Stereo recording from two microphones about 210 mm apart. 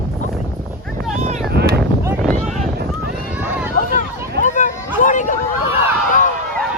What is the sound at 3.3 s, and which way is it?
Run, 10° right (ahead or behind).